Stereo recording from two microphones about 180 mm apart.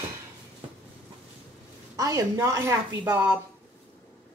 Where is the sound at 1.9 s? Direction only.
15° right (ahead or behind).